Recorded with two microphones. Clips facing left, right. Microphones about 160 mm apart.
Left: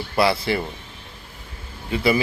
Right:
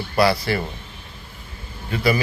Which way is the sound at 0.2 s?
20° left (ahead or behind).